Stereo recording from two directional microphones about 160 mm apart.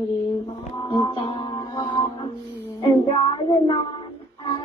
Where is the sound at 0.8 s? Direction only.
35° left (ahead or behind).